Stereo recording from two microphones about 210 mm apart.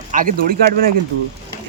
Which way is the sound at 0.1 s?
40° right (ahead or behind).